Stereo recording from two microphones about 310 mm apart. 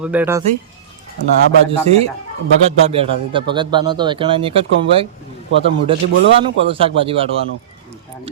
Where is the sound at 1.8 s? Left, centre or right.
Centre.